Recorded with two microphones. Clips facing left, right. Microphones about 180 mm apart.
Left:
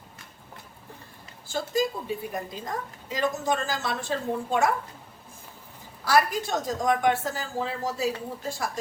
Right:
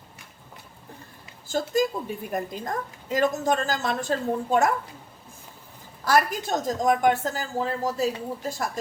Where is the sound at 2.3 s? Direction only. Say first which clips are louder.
Right 3 dB; 50° right (ahead or behind).